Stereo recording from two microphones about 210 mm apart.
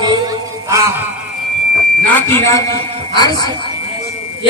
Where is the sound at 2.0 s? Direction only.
10° left (ahead or behind).